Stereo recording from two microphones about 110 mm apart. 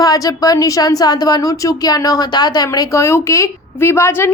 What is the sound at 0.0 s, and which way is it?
A woman's voice, 35° left (ahead or behind).